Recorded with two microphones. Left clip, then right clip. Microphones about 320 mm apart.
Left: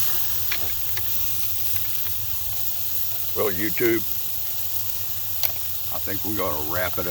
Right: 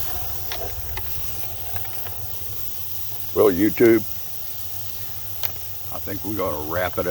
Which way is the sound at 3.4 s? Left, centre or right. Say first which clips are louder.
Right 8 dB; right.